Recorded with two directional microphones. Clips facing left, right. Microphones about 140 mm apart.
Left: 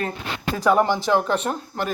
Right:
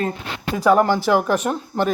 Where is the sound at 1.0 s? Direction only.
10° right (ahead or behind).